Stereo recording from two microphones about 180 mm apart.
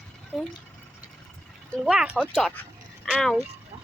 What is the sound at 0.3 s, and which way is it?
Speech, 5° left (ahead or behind).